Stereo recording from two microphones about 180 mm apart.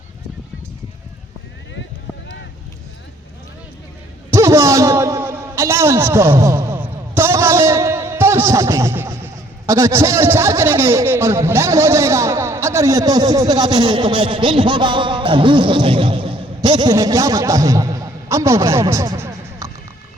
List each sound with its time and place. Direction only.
4.3 s a man's voice: 15° right (ahead or behind)